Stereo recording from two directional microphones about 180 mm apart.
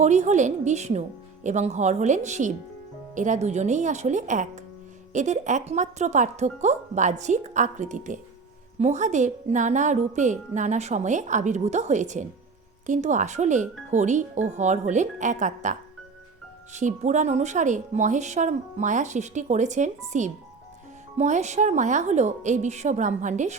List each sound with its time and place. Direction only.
0.0 s speech: 40° right (ahead or behind)